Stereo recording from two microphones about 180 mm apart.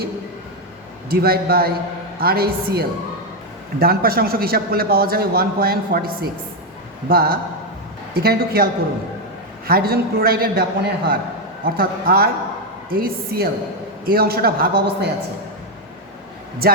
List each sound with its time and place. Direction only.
1.1 s a man's voice: 60° right (ahead or behind)
7.1 s a man's voice: 55° right (ahead or behind)
16.6 s a man's voice: 55° right (ahead or behind)